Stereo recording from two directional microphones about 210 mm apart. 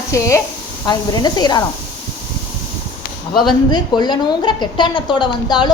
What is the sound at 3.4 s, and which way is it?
A woman's voice, 20° left (ahead or behind).